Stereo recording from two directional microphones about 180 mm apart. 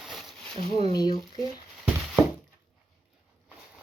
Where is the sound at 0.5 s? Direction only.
35° right (ahead or behind).